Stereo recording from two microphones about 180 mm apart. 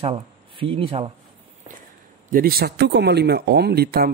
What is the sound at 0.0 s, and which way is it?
Speech, 30° right (ahead or behind).